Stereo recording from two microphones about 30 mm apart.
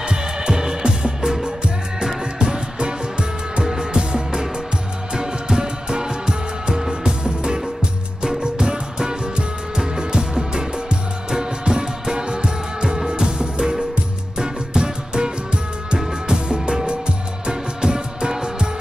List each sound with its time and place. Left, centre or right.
0.0 s music: right